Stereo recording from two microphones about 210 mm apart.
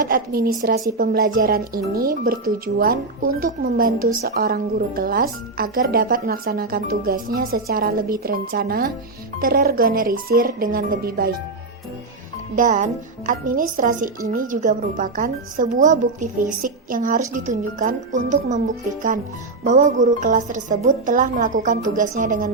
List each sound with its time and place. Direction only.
0.0 s speech: 45° right (ahead or behind)
12.5 s speech: 35° right (ahead or behind)
19.6 s speech: 35° right (ahead or behind)